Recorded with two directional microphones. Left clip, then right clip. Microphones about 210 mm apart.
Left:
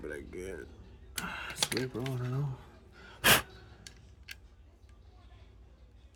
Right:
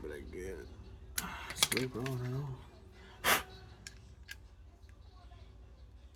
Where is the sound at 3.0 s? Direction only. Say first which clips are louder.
Left 6 dB; 40° left (ahead or behind).